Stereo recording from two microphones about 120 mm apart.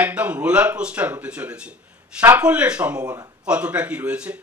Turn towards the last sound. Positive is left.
turn(degrees=-10)  # may be behind; listen again after turning